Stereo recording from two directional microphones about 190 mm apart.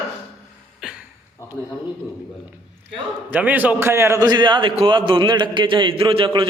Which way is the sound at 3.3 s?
10° right (ahead or behind).